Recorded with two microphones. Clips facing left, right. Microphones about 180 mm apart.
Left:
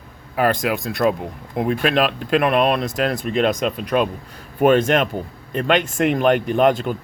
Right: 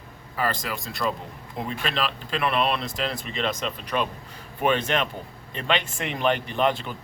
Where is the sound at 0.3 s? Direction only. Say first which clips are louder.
Left 9 dB; 60° left (ahead or behind).